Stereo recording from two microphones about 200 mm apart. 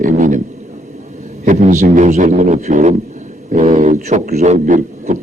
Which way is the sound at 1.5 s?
35° right (ahead or behind).